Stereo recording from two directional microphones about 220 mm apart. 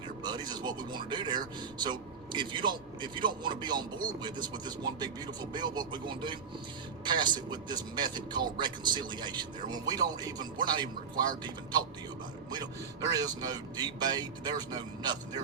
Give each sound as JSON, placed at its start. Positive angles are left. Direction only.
{"t": 0.2, "sound": "a man's voice", "side_deg": -20}
{"t": 13.1, "sound": "speech", "side_deg": -15}